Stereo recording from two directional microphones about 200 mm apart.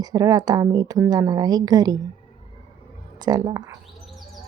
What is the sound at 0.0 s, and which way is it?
A woman's voice, 20° right (ahead or behind).